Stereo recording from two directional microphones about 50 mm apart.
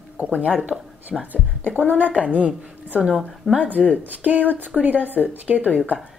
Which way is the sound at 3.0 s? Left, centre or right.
Centre.